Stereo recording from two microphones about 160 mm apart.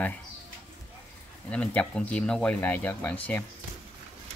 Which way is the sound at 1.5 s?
5° left (ahead or behind).